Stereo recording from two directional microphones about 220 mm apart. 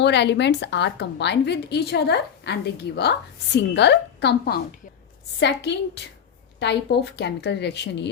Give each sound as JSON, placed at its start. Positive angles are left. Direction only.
{"t": 0.0, "sound": "a woman's voice", "side_deg": 50}